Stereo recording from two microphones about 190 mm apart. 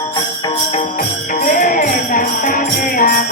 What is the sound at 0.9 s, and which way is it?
Music, 45° left (ahead or behind).